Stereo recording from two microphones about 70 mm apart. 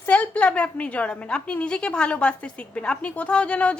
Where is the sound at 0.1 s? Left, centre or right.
Centre.